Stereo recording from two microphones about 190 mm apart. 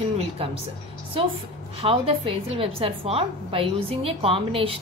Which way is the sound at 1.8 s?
30° right (ahead or behind).